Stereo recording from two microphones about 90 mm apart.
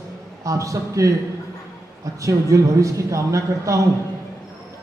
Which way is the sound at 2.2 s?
35° right (ahead or behind).